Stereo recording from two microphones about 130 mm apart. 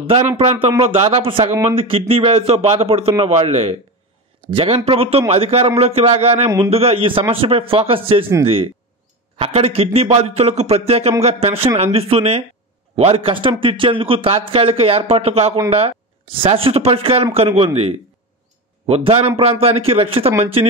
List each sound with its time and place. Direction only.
0.4 s a man's voice: 55° right (ahead or behind)
9.4 s a man's voice: 50° right (ahead or behind)
18.9 s a man's voice: 50° right (ahead or behind)